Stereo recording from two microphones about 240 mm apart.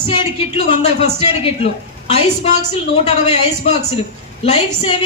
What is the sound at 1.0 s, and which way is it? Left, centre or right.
A man's voice, left.